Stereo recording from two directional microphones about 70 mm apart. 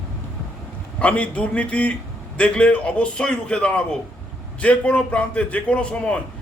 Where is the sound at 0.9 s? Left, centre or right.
Centre.